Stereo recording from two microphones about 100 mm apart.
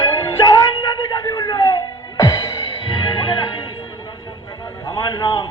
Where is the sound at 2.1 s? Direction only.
35° left (ahead or behind).